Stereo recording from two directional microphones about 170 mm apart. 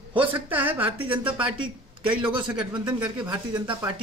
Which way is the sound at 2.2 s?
30° right (ahead or behind).